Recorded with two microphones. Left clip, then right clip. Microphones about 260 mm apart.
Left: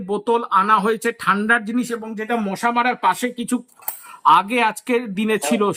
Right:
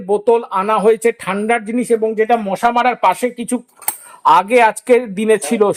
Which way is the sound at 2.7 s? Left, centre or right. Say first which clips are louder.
Right 4 dB; centre.